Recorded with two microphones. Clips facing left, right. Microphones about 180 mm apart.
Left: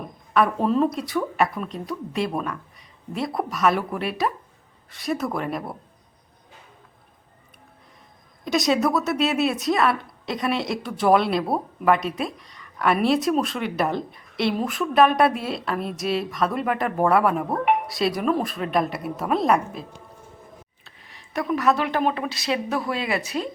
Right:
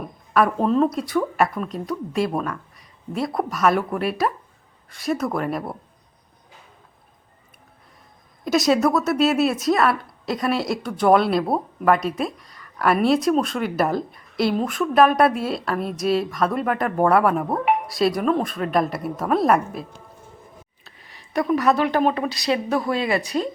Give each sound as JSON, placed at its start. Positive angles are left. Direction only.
{"t": 0.3, "sound": "speech", "side_deg": 0}
{"t": 8.4, "sound": "speech", "side_deg": 0}
{"t": 20.8, "sound": "a woman's voice", "side_deg": 0}